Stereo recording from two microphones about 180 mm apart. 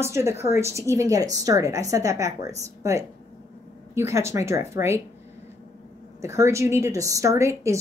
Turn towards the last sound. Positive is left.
turn(degrees=-15)  # may be behind; listen again after turning